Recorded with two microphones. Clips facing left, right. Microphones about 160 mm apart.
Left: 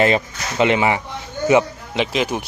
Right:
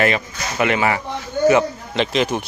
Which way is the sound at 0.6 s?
20° left (ahead or behind).